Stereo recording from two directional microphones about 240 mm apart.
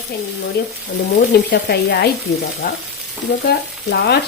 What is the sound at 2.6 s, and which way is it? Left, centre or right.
Frying, left.